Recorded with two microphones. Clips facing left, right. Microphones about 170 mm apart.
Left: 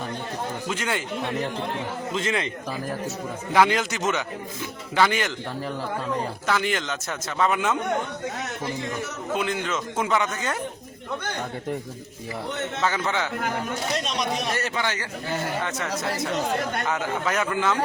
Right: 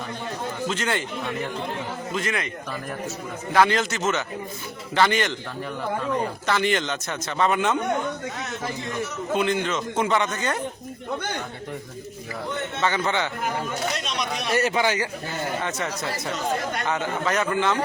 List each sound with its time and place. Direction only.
0.7 s a man's voice: 10° left (ahead or behind)
2.1 s a man's voice: 25° left (ahead or behind)
3.5 s a man's voice: 10° left (ahead or behind)
6.5 s a man's voice: 5° left (ahead or behind)
9.3 s a man's voice: centre (ahead or behind)
12.8 s a man's voice: centre (ahead or behind)
14.5 s a man's voice: 10° right (ahead or behind)
15.6 s a man's voice: centre (ahead or behind)